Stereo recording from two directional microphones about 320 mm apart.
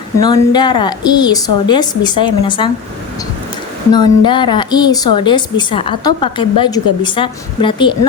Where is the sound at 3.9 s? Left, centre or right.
Centre.